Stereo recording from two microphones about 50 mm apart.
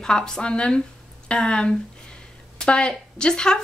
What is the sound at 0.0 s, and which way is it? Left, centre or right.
A woman's voice, centre.